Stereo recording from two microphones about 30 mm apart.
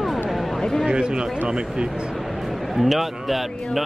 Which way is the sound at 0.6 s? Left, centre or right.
Centre.